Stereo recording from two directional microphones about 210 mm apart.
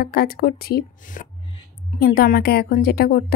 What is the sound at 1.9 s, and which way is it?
Speech, 45° left (ahead or behind).